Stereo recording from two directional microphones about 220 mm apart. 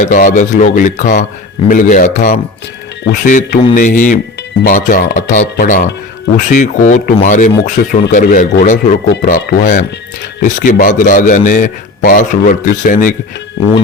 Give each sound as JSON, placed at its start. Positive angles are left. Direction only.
{"t": 0.0, "sound": "a man's voice", "side_deg": 35}